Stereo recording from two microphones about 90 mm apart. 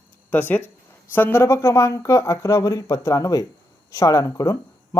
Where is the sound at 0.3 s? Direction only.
20° left (ahead or behind).